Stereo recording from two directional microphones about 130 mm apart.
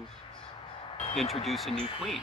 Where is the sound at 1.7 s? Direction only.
45° left (ahead or behind).